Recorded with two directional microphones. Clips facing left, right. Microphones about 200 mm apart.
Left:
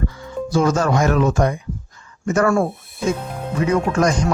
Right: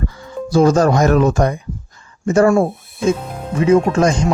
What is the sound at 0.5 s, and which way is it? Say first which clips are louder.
Speech: right 5 dB; 35° right (ahead or behind).